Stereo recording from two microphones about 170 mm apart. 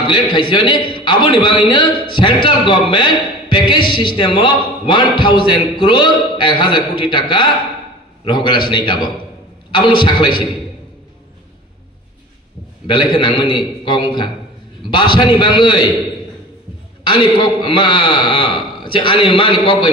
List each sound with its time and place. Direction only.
0.0 s a man's voice: 25° left (ahead or behind)
12.8 s a man's voice: 30° left (ahead or behind)
17.0 s a man's voice: 30° left (ahead or behind)